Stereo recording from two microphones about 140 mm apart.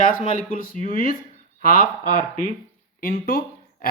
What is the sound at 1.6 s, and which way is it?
Speech, 90° left.